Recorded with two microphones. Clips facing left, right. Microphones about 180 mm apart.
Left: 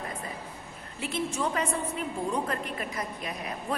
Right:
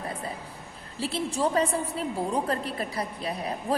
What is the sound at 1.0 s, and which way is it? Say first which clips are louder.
A woman's voice: right 3 dB; 35° right (ahead or behind).